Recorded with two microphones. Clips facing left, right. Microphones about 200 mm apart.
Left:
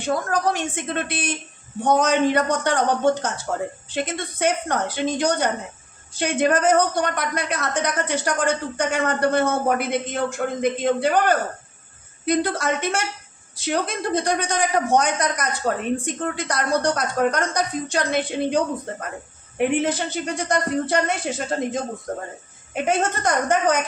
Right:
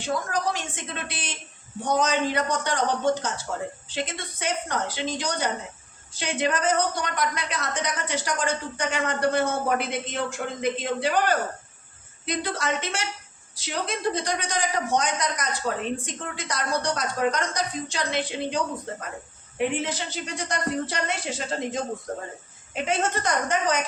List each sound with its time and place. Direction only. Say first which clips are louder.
0.0 s a man's voice: left 5 dB; 55° left (ahead or behind)